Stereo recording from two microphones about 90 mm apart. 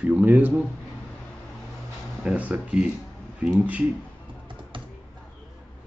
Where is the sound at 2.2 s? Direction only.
15° right (ahead or behind).